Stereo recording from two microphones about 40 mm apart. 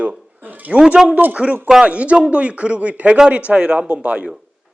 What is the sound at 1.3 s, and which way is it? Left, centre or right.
Speech, right.